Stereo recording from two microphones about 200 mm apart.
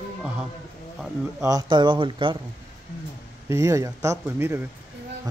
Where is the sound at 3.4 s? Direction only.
15° right (ahead or behind).